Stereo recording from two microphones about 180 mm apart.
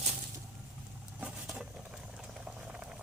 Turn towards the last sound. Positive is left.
turn(degrees=-5)  # may be behind; listen again after turning